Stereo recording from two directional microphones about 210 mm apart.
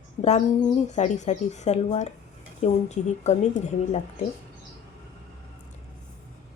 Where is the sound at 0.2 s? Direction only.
30° left (ahead or behind).